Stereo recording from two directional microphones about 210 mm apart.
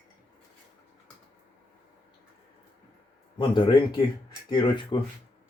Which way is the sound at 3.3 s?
25° left (ahead or behind).